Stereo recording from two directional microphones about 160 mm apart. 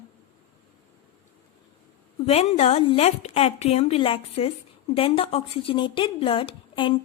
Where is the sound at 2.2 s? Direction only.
40° left (ahead or behind).